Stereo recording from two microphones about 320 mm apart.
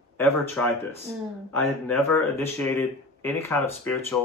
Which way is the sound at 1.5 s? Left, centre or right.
Centre.